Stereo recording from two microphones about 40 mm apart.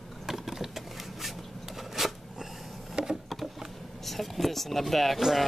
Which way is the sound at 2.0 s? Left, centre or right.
Centre.